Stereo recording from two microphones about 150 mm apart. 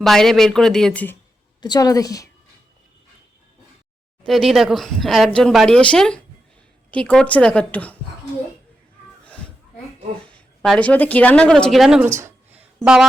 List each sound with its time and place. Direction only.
0.0 s speech: centre (ahead or behind)
1.6 s a woman's voice: 25° left (ahead or behind)
4.2 s a woman's voice: centre (ahead or behind)
10.3 s speech: 5° left (ahead or behind)
12.5 s a sound: 5° right (ahead or behind)